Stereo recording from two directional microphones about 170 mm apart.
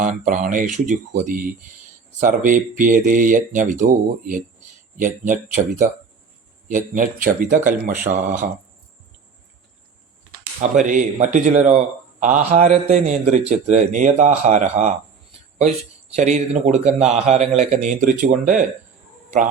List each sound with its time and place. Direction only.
0.0 s speech: 50° right (ahead or behind)
10.6 s speech: 50° right (ahead or behind)
16.1 s speech: 45° right (ahead or behind)